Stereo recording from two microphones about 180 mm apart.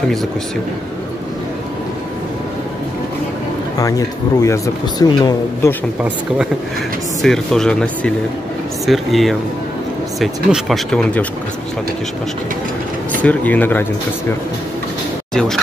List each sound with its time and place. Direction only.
4.4 s speech: 20° left (ahead or behind)
7.2 s speech: centre (ahead or behind)
13.2 s speech: 10° left (ahead or behind)
15.3 s speech: 5° left (ahead or behind)